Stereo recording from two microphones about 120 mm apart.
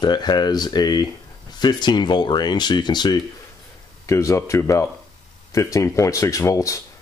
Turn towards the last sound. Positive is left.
turn(degrees=25)  # may be behind; listen again after turning